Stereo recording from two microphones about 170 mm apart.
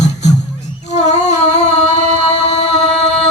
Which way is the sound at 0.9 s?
40° left (ahead or behind).